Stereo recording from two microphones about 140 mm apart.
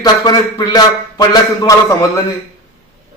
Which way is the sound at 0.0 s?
30° left (ahead or behind).